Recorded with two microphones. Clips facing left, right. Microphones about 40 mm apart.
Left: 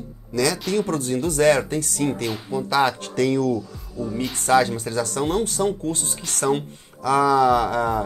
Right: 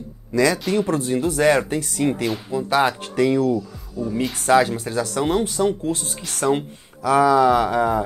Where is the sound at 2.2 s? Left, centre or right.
Centre.